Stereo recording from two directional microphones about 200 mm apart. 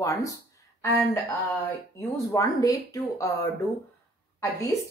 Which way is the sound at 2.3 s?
15° left (ahead or behind).